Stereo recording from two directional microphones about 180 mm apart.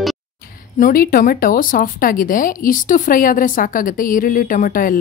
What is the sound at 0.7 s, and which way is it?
Speech, 50° left (ahead or behind).